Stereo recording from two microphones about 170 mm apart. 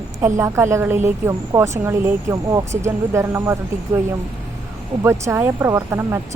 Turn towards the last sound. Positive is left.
turn(degrees=-15)  # may be behind; listen again after turning